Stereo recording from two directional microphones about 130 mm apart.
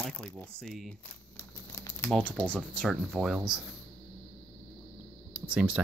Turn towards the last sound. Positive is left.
turn(degrees=-10)  # may be behind; listen again after turning